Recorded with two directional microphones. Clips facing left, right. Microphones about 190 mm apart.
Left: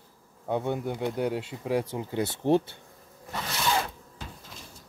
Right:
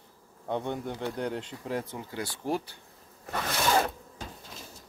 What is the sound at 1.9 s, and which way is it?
Speech, 20° left (ahead or behind).